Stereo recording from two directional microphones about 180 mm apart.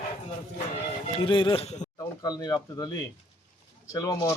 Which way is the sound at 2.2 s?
20° left (ahead or behind).